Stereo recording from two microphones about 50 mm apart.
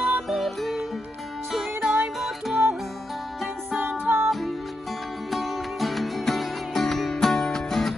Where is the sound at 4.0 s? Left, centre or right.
Right.